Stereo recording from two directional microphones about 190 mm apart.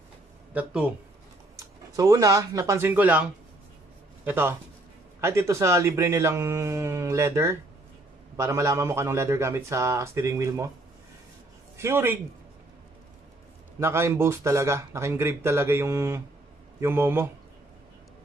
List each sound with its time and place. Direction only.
0.5 s a man's voice: 5° right (ahead or behind)
2.0 s a man's voice: 15° right (ahead or behind)
11.7 s a man's voice: 15° right (ahead or behind)
13.7 s a man's voice: 15° right (ahead or behind)